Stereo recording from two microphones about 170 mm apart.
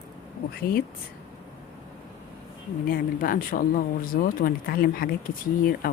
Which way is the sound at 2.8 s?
55° left (ahead or behind).